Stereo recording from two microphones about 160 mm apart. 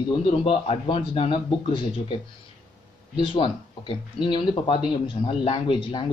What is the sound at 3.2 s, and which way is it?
A man's voice, 35° left (ahead or behind).